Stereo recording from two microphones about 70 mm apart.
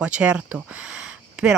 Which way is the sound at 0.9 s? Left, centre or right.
Centre.